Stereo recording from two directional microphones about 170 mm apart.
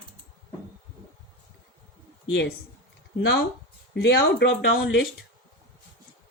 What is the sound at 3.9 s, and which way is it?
Speech, 90° left.